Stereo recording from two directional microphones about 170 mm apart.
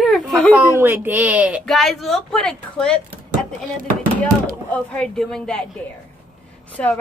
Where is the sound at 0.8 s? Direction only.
15° right (ahead or behind).